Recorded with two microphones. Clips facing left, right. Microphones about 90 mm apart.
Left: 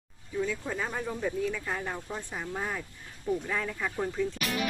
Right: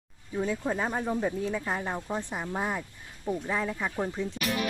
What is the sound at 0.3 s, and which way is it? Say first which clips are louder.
Speech: right 3 dB; 35° right (ahead or behind).